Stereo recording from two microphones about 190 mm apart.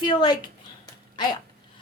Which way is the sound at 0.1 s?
25° left (ahead or behind).